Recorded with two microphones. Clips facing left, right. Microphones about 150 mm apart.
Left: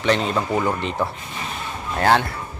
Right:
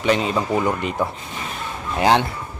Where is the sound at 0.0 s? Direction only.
5° right (ahead or behind).